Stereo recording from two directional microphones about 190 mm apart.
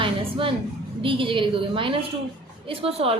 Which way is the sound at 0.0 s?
25° right (ahead or behind).